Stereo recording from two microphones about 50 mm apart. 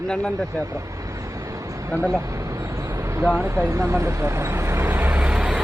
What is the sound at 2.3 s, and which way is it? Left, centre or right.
Vehicle, right.